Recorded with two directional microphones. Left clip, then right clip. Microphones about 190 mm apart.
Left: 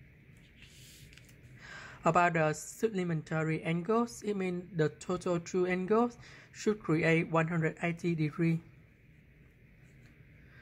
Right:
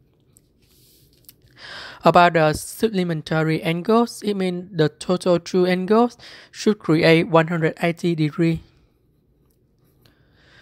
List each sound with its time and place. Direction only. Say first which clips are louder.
1.6 s a woman's voice: right 14 dB; 35° right (ahead or behind)
3.3 s speech: right 13 dB; 50° right (ahead or behind); by 8.5 s 35° right (ahead or behind)